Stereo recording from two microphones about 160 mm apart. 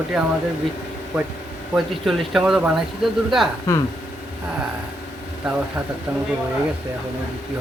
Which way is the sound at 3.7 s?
20° left (ahead or behind).